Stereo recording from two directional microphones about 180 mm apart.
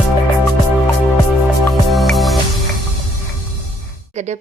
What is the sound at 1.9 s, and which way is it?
Music, centre (ahead or behind).